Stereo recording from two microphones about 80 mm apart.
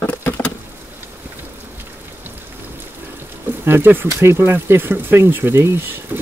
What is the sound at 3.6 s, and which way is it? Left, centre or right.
Speech, right.